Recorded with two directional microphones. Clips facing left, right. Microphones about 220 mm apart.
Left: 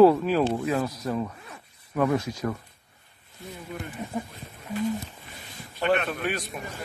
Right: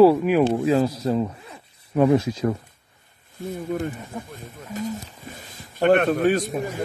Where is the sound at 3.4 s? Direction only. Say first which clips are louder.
Right 11 dB; 50° right (ahead or behind).